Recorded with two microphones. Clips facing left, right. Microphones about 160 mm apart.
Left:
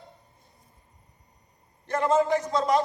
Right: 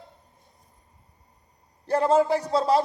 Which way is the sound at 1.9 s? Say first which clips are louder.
Right 2 dB; 35° right (ahead or behind).